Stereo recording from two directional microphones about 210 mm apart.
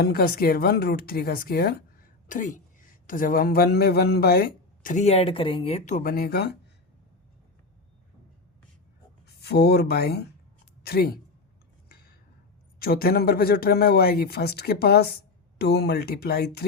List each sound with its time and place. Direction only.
0.0 s a woman's voice: 45° left (ahead or behind)
9.2 s speech: 50° left (ahead or behind)
12.8 s speech: 45° left (ahead or behind)